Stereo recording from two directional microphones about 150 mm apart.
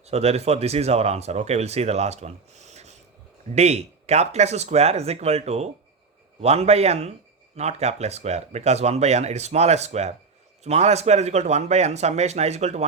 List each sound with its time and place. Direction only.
0.1 s speech: 45° right (ahead or behind)